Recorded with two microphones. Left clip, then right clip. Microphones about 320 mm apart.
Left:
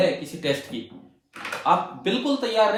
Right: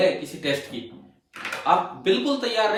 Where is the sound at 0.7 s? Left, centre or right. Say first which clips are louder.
Left 1 dB; left.